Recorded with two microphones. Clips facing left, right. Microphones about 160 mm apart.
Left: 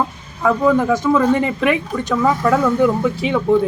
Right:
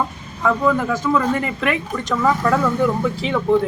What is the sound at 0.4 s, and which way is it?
Speech, 15° left (ahead or behind).